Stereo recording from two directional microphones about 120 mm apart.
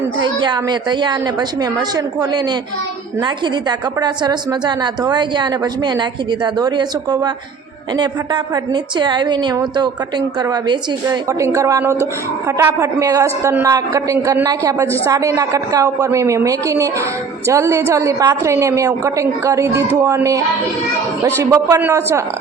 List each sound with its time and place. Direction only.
0.2 s a woman's voice: 35° right (ahead or behind); by 22.2 s 20° right (ahead or behind)